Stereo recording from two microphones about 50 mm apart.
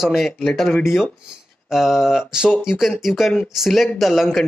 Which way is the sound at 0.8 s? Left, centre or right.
Centre.